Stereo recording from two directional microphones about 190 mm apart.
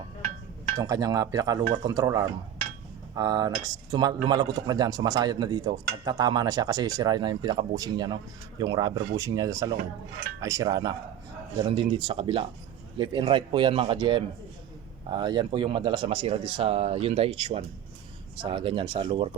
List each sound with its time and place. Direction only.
0.8 s speech: 20° right (ahead or behind)